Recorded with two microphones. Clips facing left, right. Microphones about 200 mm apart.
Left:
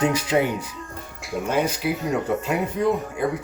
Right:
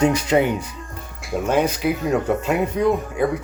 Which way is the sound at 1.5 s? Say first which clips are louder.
Right 3 dB; 50° right (ahead or behind).